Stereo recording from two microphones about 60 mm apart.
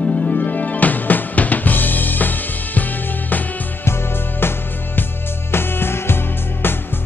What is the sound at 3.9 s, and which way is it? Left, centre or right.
Music, left.